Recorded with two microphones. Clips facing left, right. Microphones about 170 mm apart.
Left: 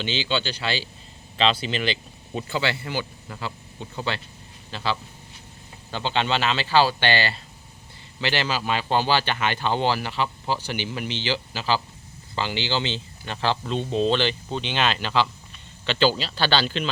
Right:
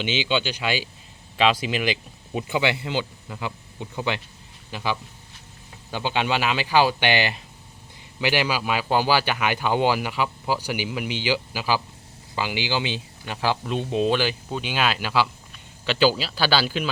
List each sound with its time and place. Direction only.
0.0 s speech: 10° right (ahead or behind)